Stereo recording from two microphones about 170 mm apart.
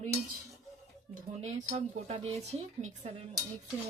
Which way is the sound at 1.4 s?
40° right (ahead or behind).